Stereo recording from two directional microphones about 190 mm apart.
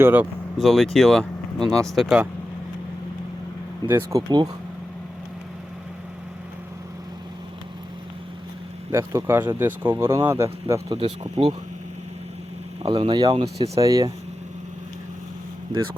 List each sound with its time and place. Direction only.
0.0 s speech: 10° right (ahead or behind)
0.6 s speech: centre (ahead or behind)
3.8 s speech: 15° right (ahead or behind)
8.9 s speech: 15° right (ahead or behind)
10.9 s speech: 30° right (ahead or behind)
12.8 s speech: 25° right (ahead or behind)
13.8 s speech: 20° right (ahead or behind)